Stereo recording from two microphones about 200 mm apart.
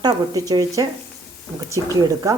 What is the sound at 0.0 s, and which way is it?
Speech, 20° right (ahead or behind).